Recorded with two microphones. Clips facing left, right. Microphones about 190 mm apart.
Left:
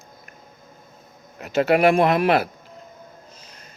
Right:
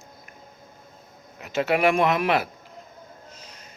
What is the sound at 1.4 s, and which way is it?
Speech, 40° left (ahead or behind).